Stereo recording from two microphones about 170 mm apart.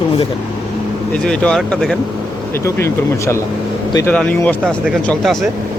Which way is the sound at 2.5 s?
15° left (ahead or behind).